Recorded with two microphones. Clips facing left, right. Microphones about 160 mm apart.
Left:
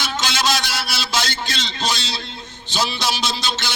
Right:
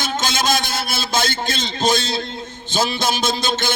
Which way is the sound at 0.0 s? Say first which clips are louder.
Right 1 dB; 50° right (ahead or behind).